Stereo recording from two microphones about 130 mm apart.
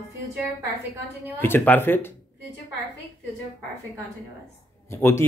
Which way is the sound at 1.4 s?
15° left (ahead or behind).